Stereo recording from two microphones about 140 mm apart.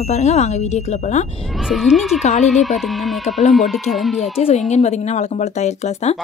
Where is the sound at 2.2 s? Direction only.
55° left (ahead or behind).